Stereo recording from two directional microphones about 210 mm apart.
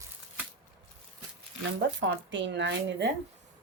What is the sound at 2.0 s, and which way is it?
Speech, 60° right (ahead or behind).